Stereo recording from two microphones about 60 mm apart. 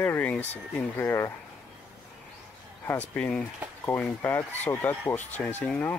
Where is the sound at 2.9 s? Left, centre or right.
Left.